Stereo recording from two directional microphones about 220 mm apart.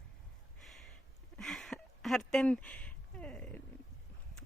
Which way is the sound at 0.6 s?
Centre (ahead or behind).